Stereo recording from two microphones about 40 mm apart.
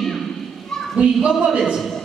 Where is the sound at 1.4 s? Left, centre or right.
Centre.